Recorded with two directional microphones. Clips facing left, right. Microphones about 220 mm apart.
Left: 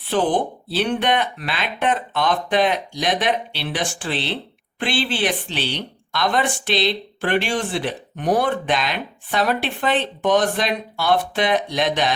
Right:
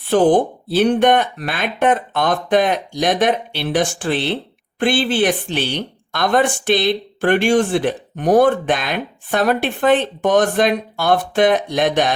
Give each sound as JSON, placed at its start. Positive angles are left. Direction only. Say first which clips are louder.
{"t": 0.1, "sound": "speech", "louder": "right 7 dB", "side_deg": -45}